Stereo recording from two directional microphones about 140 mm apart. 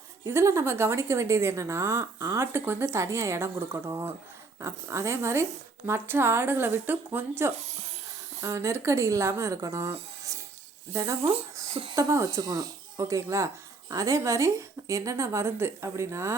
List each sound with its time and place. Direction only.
0.3 s a woman's voice: 20° right (ahead or behind)
11.2 s speech: 45° right (ahead or behind)
11.9 s a woman's voice: 25° right (ahead or behind)